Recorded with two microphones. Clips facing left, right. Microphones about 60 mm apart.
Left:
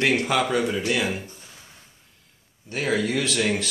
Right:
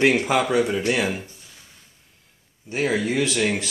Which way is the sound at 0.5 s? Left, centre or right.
Centre.